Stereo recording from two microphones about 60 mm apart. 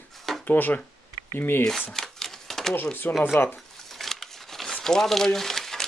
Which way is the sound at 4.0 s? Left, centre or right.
Centre.